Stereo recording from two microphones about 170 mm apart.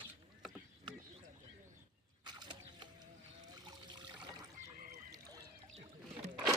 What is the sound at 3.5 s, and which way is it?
Trickle, 25° right (ahead or behind).